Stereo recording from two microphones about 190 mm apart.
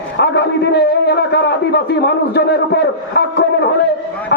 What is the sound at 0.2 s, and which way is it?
A man's voice, 60° left (ahead or behind).